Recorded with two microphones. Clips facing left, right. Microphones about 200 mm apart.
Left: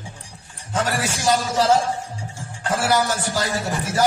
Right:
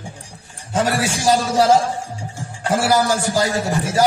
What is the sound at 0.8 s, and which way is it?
A man's voice, 10° right (ahead or behind).